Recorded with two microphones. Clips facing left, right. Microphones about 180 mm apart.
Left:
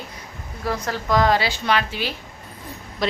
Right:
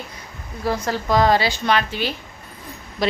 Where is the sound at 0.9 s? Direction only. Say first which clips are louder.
Right 1 dB; 30° right (ahead or behind).